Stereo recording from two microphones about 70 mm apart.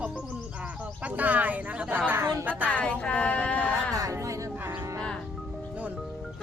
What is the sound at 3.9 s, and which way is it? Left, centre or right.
Speech, right.